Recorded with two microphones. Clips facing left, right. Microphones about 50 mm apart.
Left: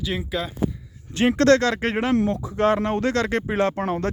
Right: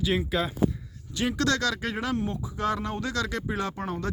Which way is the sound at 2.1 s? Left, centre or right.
Left.